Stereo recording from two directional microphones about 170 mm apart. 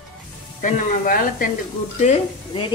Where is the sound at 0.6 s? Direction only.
50° left (ahead or behind).